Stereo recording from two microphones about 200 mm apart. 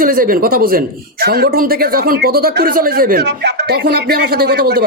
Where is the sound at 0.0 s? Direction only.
45° right (ahead or behind).